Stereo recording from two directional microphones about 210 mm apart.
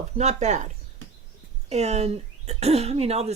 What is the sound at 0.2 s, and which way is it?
Speech, 30° right (ahead or behind).